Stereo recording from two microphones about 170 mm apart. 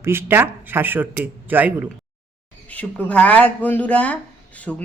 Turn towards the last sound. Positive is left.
turn(degrees=5)  # may be behind; listen again after turning